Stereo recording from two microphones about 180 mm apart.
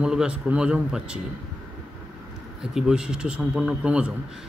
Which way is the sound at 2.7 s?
5° right (ahead or behind).